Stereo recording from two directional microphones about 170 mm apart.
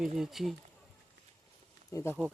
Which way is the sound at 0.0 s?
Centre (ahead or behind).